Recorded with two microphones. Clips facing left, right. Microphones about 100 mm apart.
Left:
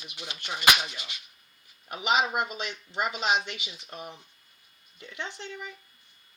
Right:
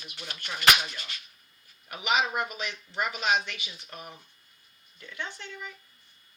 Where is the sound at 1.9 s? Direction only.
25° left (ahead or behind).